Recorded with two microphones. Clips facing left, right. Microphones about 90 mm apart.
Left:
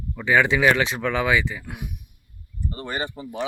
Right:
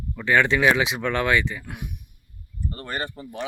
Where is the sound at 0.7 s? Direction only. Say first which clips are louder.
Left 1 dB; 5° right (ahead or behind).